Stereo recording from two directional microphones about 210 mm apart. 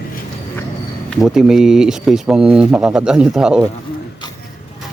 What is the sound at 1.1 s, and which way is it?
Speech, centre (ahead or behind).